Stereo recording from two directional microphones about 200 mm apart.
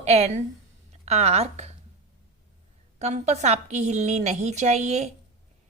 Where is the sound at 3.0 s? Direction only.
35° right (ahead or behind).